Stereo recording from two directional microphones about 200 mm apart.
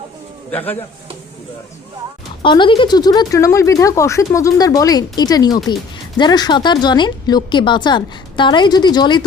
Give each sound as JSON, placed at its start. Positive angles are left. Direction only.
{"t": 2.4, "sound": "speech", "side_deg": 25}